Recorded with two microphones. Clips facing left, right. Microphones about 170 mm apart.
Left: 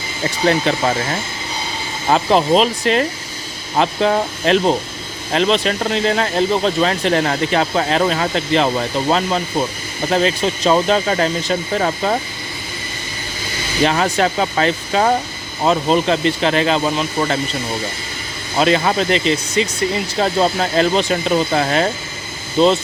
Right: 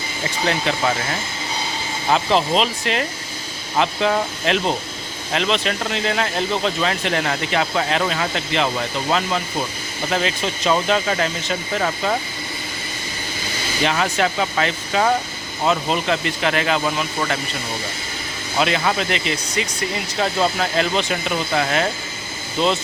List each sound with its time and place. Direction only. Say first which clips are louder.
2.0 s speech: left 4 dB; 45° left (ahead or behind)
13.8 s speech: left 4 dB; 40° left (ahead or behind)
18.6 s speech: left 5 dB; 35° left (ahead or behind)